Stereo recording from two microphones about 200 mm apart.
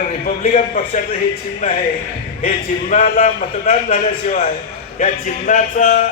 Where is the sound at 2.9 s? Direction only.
40° left (ahead or behind).